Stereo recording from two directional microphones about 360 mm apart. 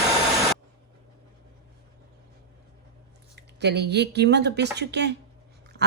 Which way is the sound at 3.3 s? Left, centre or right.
Right.